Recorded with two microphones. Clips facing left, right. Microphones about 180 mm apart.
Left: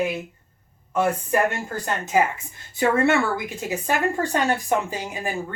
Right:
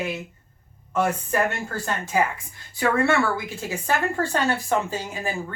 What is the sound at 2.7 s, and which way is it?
A woman's voice, 20° left (ahead or behind).